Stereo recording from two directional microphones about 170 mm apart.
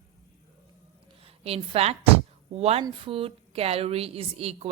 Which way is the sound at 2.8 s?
30° right (ahead or behind).